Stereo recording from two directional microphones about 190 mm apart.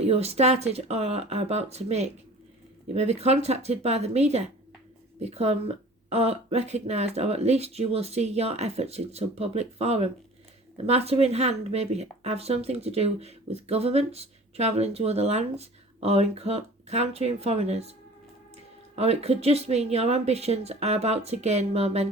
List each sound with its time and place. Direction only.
0.0 s speech: 35° right (ahead or behind)